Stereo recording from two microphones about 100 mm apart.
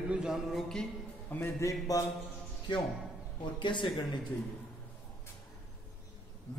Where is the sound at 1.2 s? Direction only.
20° left (ahead or behind).